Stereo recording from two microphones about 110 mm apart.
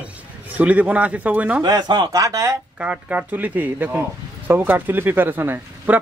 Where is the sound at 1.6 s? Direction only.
40° right (ahead or behind).